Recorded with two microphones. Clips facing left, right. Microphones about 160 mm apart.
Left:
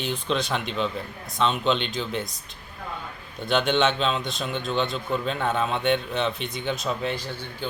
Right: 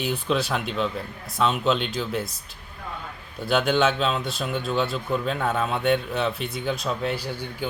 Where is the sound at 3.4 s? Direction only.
5° right (ahead or behind).